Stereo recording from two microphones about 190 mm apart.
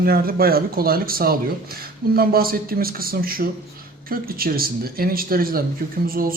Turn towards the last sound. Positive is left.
turn(degrees=-50)  # may be behind; listen again after turning